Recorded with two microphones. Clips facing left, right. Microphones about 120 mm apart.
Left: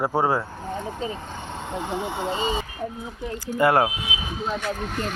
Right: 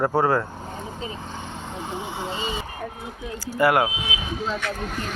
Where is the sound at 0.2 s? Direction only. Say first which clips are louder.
Right 1 dB; 15° left (ahead or behind).